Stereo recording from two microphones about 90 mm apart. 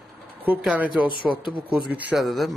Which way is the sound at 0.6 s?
10° right (ahead or behind).